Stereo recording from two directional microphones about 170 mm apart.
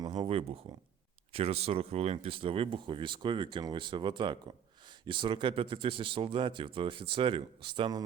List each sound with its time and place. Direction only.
0.0 s speech: 25° right (ahead or behind)